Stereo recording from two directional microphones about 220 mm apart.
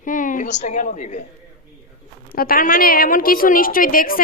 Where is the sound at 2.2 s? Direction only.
40° left (ahead or behind).